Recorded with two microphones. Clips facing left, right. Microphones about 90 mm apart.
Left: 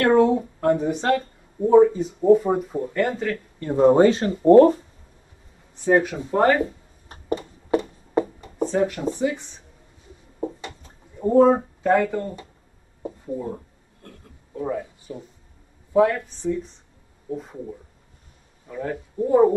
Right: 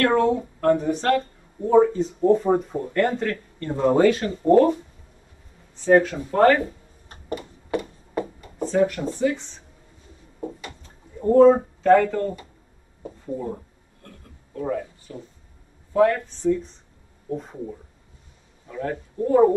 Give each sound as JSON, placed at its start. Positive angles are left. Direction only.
{"t": 0.0, "sound": "speech", "side_deg": 20}
{"t": 5.8, "sound": "speech", "side_deg": 15}
{"t": 7.3, "sound": "a sound", "side_deg": 25}
{"t": 8.6, "sound": "speech", "side_deg": 20}
{"t": 11.3, "sound": "speech", "side_deg": 10}
{"t": 14.5, "sound": "a sound", "side_deg": 15}
{"t": 15.9, "sound": "speech", "side_deg": 10}
{"t": 17.3, "sound": "speech", "side_deg": 0}
{"t": 18.8, "sound": "speech", "side_deg": 15}